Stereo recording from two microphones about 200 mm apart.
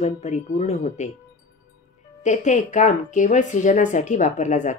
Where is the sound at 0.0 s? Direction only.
35° left (ahead or behind).